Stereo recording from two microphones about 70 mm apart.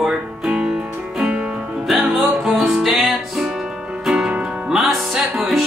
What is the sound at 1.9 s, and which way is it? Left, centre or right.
Music, centre.